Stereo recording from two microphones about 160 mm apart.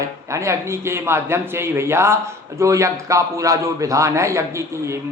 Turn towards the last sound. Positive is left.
turn(degrees=-20)  # may be behind; listen again after turning